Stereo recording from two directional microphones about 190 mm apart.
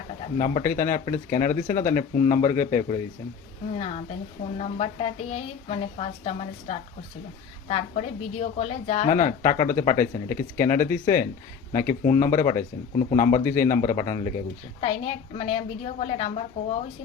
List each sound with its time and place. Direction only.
0.3 s a woman's voice: 45° left (ahead or behind)
3.8 s a woman's voice: 35° left (ahead or behind)